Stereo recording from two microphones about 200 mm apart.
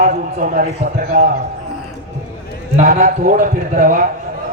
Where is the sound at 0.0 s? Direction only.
40° right (ahead or behind).